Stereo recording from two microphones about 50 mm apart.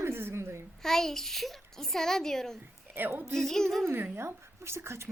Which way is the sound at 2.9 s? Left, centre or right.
Right.